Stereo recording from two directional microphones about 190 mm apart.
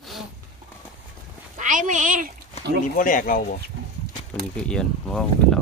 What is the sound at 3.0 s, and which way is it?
Speech, 45° left (ahead or behind).